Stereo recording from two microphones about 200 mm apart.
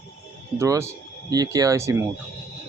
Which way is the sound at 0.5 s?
15° right (ahead or behind).